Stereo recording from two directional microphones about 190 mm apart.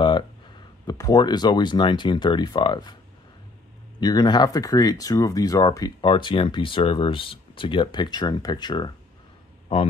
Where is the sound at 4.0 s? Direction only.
20° left (ahead or behind).